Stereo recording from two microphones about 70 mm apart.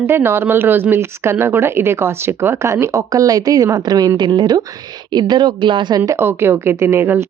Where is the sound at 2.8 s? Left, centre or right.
Right.